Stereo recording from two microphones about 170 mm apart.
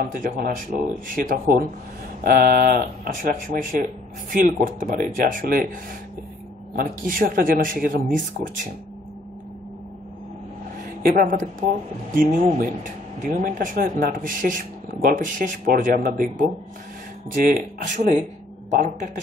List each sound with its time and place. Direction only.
0.1 s speech: 55° right (ahead or behind)
6.7 s speech: 55° right (ahead or behind)
11.0 s speech: 55° right (ahead or behind)